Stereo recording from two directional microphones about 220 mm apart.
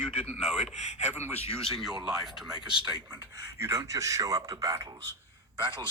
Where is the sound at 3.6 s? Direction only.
15° right (ahead or behind).